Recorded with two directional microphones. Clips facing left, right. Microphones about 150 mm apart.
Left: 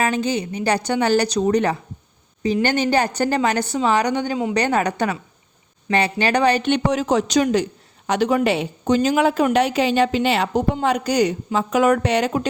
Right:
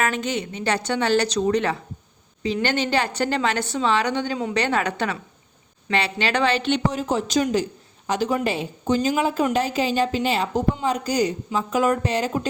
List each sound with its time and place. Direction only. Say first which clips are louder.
0.0 s a woman's voice: left 3 dB; 35° left (ahead or behind); by 12.5 s 70° left (ahead or behind)